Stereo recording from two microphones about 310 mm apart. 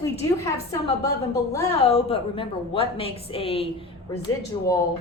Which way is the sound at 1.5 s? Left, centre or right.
Centre.